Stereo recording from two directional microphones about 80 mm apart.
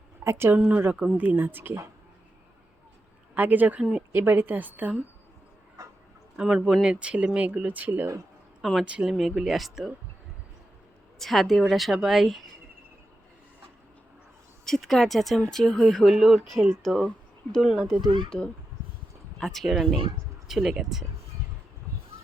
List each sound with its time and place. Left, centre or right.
0.3 s a woman's voice: right
3.3 s a woman's voice: right
5.8 s music: right
6.3 s speech: centre
8.8 s speech: centre
11.2 s speech: centre
14.6 s speech: centre
18.0 s speech: right
19.4 s speech: centre